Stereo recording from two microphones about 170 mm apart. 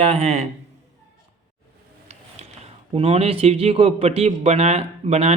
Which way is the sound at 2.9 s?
35° right (ahead or behind).